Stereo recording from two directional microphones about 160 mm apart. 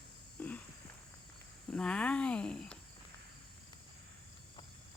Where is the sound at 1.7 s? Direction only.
5° left (ahead or behind).